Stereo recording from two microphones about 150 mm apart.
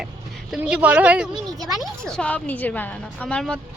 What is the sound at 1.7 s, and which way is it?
A woman's voice, centre (ahead or behind).